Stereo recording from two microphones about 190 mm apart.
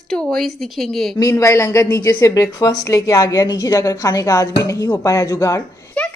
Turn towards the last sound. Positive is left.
turn(degrees=5)  # may be behind; listen again after turning